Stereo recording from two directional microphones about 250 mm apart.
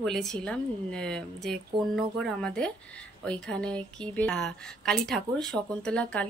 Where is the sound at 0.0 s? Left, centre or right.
Centre.